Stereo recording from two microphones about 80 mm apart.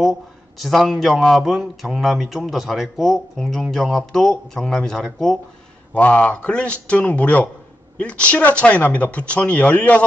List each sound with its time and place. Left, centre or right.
0.0 s speech: centre
5.9 s speech: centre